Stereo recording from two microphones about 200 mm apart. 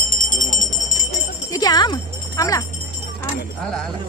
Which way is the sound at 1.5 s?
20° left (ahead or behind).